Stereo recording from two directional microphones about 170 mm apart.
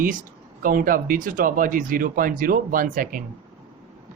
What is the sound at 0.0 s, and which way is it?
Speech, 50° right (ahead or behind).